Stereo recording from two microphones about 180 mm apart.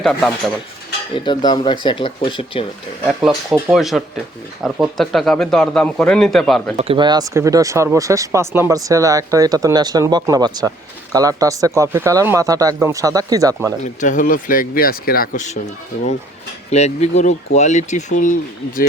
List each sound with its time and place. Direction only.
0.0 s speech: centre (ahead or behind)
1.1 s speech: 25° left (ahead or behind)
3.1 s speech: 5° right (ahead or behind)
6.7 s speech: 30° right (ahead or behind)
14.0 s speech: 45° left (ahead or behind)
16.6 s speech: 35° left (ahead or behind)